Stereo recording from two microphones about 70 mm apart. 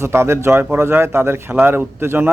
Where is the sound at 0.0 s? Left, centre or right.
Right.